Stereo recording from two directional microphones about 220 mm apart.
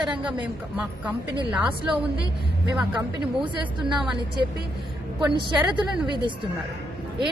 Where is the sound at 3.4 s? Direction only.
20° right (ahead or behind).